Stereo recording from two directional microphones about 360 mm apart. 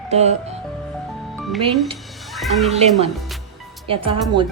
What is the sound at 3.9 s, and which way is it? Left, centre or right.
Speech, centre.